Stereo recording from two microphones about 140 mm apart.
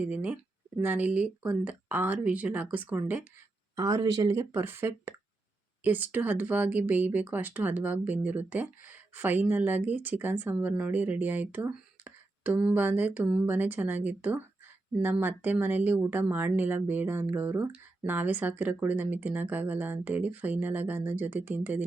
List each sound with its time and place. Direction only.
0.1 s speech: 10° right (ahead or behind)
3.8 s speech: 25° right (ahead or behind)